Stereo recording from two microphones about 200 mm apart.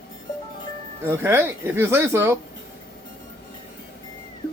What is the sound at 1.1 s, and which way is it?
Speech, 10° right (ahead or behind).